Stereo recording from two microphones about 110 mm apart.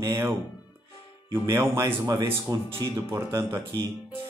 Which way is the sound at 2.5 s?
35° right (ahead or behind).